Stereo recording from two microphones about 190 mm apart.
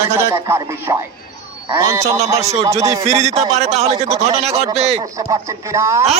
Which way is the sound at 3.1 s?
35° right (ahead or behind).